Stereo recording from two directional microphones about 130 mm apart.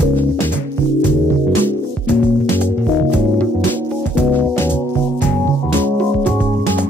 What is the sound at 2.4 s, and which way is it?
Music, 15° left (ahead or behind).